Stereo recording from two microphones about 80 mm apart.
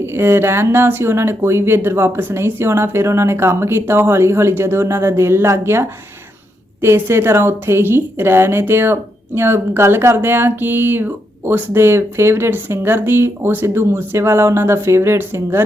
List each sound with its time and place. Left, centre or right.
0.0 s a woman's voice: right